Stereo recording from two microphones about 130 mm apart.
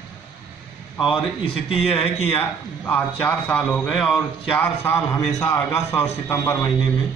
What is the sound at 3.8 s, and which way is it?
Speech, centre (ahead or behind).